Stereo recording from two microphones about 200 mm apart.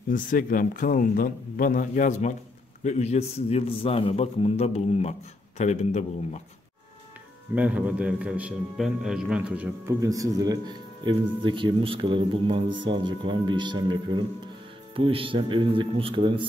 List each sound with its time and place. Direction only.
0.1 s a man's voice: 45° left (ahead or behind)
7.5 s a man's voice: 5° right (ahead or behind); by 16.4 s 25° right (ahead or behind)